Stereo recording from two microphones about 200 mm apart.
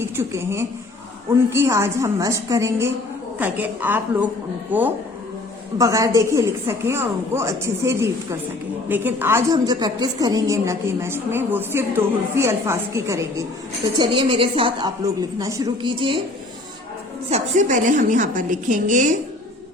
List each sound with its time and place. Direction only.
0.0 s a woman's voice: 15° right (ahead or behind)
17.2 s a woman's voice: 35° right (ahead or behind)